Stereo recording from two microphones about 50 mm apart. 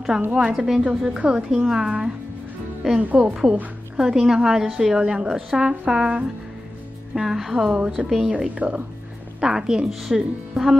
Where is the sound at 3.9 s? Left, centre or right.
Centre.